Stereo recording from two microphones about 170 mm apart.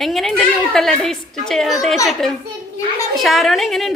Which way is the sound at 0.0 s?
Centre (ahead or behind).